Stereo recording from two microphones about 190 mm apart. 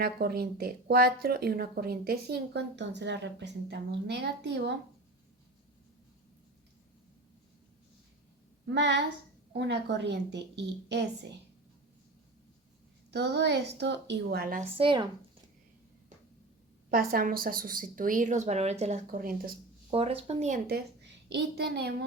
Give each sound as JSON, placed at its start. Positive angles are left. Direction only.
{"t": 0.0, "sound": "speech", "side_deg": -55}
{"t": 8.7, "sound": "speech", "side_deg": -65}
{"t": 13.1, "sound": "speech", "side_deg": -60}
{"t": 14.6, "sound": "a woman's voice", "side_deg": -25}
{"t": 16.9, "sound": "speech", "side_deg": -50}
{"t": 19.9, "sound": "speech", "side_deg": -30}
{"t": 20.7, "sound": "a woman's voice", "side_deg": -60}